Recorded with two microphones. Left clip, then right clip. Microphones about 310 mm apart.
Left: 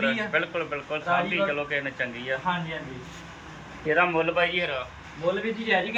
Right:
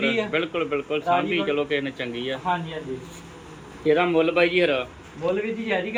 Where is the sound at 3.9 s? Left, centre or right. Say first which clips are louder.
Right 3 dB; right.